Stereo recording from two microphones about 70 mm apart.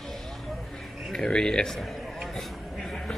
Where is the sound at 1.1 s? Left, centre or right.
Centre.